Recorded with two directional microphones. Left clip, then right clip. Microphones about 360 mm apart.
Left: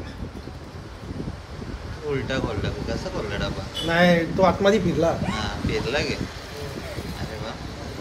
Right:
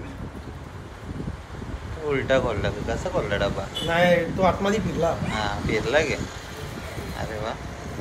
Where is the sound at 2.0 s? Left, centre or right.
Centre.